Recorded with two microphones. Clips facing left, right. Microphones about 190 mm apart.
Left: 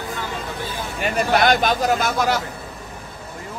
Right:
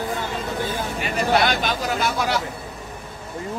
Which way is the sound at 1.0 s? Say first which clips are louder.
Left 2 dB; 50° left (ahead or behind).